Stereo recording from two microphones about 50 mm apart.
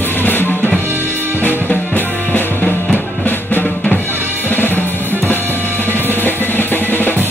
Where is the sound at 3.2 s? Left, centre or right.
Left.